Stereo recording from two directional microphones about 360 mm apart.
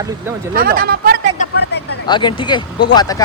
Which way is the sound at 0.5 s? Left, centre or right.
Right.